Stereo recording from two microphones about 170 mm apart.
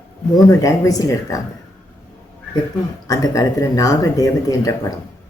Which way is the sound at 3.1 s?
20° left (ahead or behind).